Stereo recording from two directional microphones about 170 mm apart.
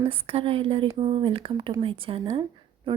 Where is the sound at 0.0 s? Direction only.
35° right (ahead or behind).